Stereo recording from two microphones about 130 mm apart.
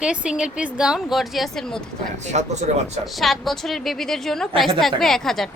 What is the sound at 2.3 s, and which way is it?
Speech, 65° right (ahead or behind).